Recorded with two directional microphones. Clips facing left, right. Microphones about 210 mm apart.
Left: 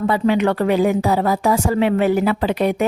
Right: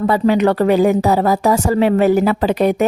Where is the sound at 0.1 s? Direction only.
40° right (ahead or behind).